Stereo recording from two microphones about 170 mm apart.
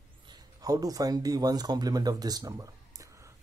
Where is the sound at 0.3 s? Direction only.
20° right (ahead or behind).